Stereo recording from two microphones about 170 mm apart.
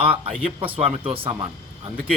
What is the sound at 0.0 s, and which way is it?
Speech, 35° right (ahead or behind).